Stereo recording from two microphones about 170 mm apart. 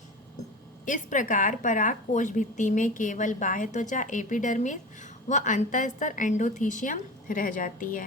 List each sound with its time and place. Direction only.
0.9 s speech: 50° left (ahead or behind)